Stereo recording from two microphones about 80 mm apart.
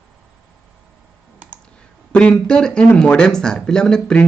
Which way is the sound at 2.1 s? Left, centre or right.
Centre.